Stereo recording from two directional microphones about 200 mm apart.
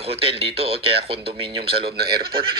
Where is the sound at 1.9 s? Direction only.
50° right (ahead or behind).